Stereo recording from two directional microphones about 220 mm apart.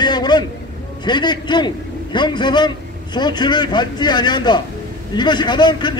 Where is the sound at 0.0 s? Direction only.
20° left (ahead or behind).